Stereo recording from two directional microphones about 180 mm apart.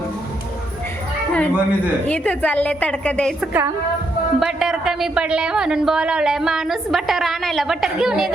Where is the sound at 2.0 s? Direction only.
5° left (ahead or behind).